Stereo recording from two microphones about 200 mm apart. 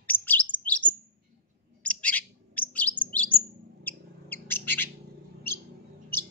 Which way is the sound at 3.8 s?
10° left (ahead or behind).